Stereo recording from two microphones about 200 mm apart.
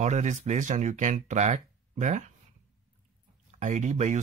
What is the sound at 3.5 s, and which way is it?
Speech, 35° right (ahead or behind).